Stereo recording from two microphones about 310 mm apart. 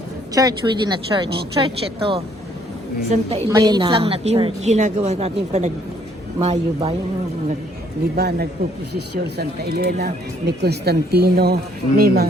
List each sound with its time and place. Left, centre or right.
0.3 s a woman's voice: centre
8.1 s speech: right